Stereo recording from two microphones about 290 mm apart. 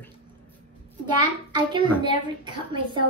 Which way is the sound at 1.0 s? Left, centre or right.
Centre.